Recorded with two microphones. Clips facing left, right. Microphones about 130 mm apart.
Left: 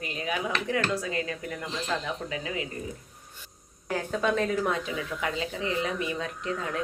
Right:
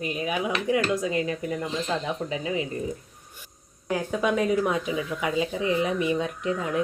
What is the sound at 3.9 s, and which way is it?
Speech, 10° right (ahead or behind).